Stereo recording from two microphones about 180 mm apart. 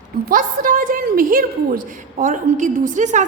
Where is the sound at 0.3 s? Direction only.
50° right (ahead or behind).